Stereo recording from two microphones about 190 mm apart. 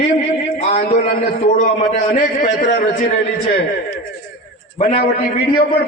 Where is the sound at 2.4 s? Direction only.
45° left (ahead or behind).